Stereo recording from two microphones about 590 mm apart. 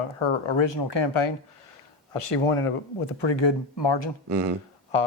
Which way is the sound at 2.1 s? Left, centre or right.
Left.